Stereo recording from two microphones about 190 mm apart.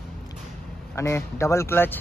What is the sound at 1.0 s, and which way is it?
Speech, 15° left (ahead or behind).